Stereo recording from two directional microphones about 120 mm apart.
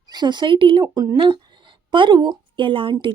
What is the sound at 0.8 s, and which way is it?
Speech, 30° right (ahead or behind).